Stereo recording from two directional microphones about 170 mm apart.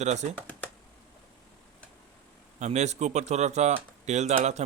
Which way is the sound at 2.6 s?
40° right (ahead or behind).